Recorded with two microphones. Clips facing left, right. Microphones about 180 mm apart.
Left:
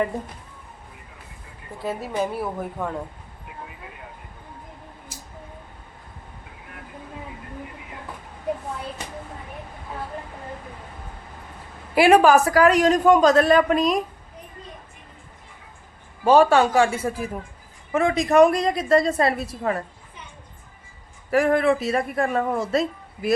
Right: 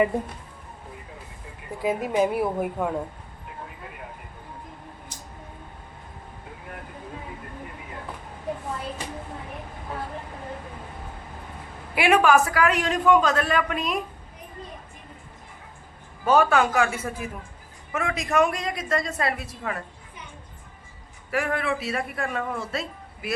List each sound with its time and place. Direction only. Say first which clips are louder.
1.8 s a woman's voice: right 3 dB; 10° right (ahead or behind)
5.1 s a sound: left 1 dB; 5° left (ahead or behind)
11.9 s speech: left 4 dB; 35° left (ahead or behind)
16.2 s speech: left 4 dB; 30° left (ahead or behind)
21.2 s speech: left 8 dB; 40° left (ahead or behind)